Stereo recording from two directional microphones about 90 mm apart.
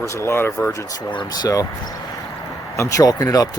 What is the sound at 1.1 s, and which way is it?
Speech, 55° left (ahead or behind).